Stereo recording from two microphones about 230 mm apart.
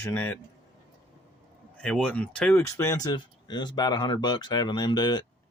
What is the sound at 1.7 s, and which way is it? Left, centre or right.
Speech, centre.